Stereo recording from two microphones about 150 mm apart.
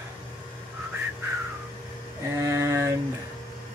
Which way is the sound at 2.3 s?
20° right (ahead or behind).